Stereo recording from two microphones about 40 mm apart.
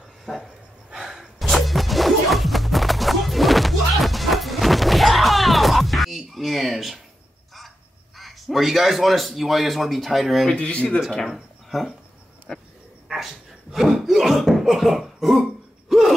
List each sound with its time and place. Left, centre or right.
0.3 s speech: left
0.9 s gasp: centre
1.4 s music: centre
8.2 s speech: centre
10.5 s speech: left
11.2 s speech: centre
12.5 s speech: centre
13.1 s a sound: centre
15.9 s gasp: centre